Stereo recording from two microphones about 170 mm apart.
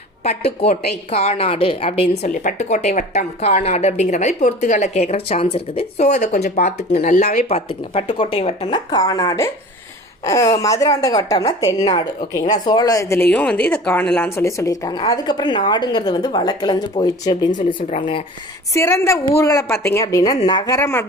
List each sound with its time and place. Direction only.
0.2 s speech: 35° left (ahead or behind); by 13.2 s 15° left (ahead or behind)
13.3 s speech: 5° left (ahead or behind); by 17.6 s 25° left (ahead or behind)
18.7 s a woman's voice: 15° left (ahead or behind)